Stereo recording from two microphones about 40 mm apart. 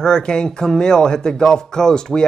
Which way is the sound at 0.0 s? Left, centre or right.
Centre.